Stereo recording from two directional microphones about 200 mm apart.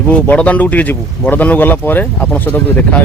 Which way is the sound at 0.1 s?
5° left (ahead or behind).